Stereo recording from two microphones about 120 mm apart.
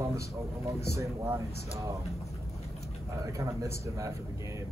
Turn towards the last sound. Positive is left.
turn(degrees=-25)  # may be behind; listen again after turning